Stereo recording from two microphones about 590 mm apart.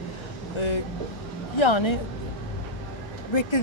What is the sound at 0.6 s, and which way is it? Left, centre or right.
Speech, left.